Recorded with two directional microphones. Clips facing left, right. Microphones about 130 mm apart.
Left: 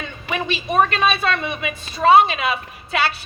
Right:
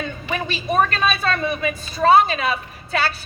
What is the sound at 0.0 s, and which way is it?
A woman's voice, 40° right (ahead or behind).